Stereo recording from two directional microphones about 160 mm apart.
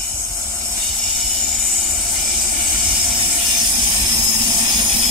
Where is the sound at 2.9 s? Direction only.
Centre (ahead or behind).